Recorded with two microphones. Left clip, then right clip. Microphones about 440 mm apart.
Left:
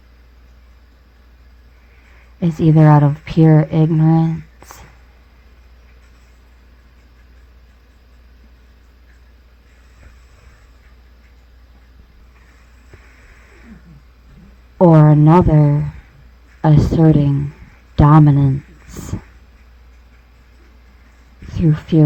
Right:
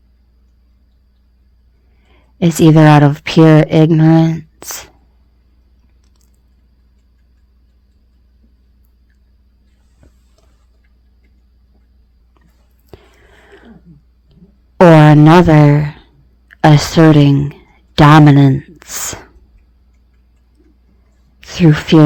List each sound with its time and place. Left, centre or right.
2.4 s speech: centre
14.9 s a sound: centre
16.6 s speech: centre
21.4 s speech: centre